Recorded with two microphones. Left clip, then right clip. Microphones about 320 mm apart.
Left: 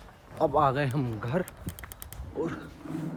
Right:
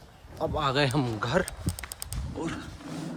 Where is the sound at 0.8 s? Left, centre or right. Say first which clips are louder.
Right 5 dB; centre.